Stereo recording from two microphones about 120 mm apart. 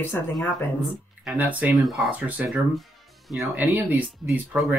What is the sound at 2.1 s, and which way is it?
Speech, 15° right (ahead or behind).